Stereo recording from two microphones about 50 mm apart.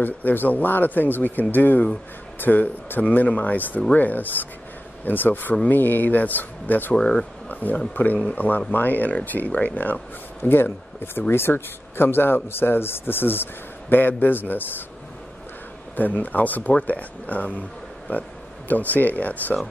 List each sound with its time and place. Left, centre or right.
0.0 s speech: left
7.4 s a sound: left
7.9 s a man's voice: left
16.0 s speech: left